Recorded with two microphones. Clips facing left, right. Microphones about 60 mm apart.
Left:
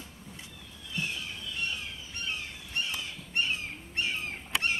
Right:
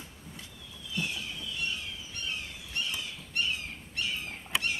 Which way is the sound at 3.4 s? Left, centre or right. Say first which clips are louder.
Left 2 dB; left.